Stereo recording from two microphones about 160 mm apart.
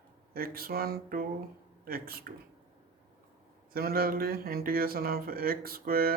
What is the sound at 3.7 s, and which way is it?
Speech, 70° right (ahead or behind).